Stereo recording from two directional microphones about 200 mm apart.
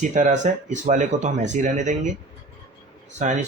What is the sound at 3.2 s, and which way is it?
Speech, 35° right (ahead or behind).